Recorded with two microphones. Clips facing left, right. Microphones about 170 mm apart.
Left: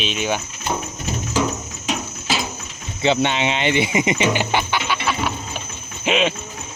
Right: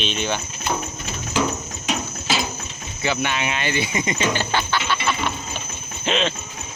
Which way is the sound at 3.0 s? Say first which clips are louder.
Left 5 dB; 25° left (ahead or behind).